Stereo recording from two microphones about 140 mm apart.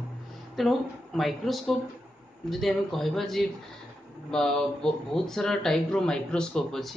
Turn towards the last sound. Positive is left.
turn(degrees=5)  # may be behind; listen again after turning